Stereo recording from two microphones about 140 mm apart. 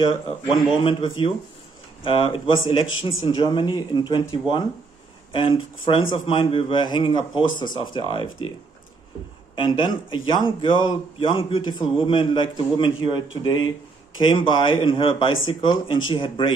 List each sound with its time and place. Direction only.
0.0 s a man's voice: 35° left (ahead or behind)
9.8 s a man's voice: 35° left (ahead or behind)